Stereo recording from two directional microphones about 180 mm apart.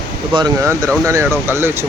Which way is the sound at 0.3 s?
20° right (ahead or behind).